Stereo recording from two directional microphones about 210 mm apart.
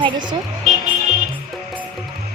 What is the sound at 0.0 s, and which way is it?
Speech, 20° right (ahead or behind).